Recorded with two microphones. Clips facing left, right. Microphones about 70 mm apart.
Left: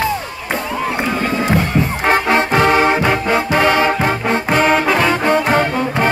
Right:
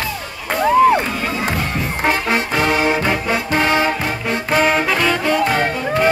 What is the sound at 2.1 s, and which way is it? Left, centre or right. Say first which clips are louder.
Music: left 4 dB; left.